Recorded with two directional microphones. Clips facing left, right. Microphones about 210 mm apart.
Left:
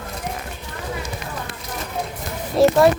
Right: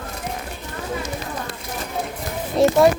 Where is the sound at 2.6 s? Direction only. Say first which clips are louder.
Left 2 dB; centre (ahead or behind).